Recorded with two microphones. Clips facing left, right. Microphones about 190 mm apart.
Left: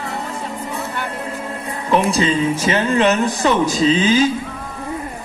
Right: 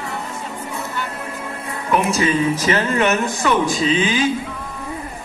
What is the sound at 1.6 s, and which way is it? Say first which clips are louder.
Speech: left 2 dB; 30° left (ahead or behind).